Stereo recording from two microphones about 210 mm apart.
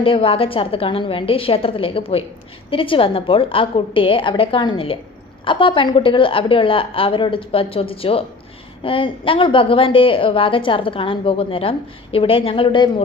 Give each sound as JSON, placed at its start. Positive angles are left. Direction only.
{"t": 0.0, "sound": "a woman's voice", "side_deg": 25}